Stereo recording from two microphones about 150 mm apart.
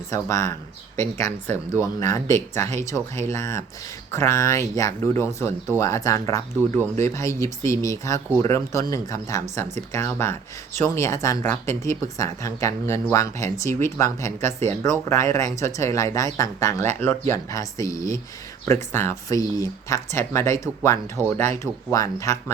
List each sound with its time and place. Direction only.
0.1 s speech: 20° left (ahead or behind)